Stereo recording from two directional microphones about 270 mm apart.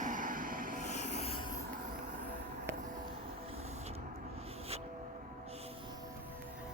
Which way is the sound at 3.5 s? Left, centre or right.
Right.